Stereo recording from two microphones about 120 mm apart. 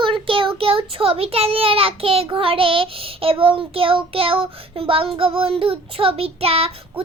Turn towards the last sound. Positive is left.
turn(degrees=-55)  # may be behind; listen again after turning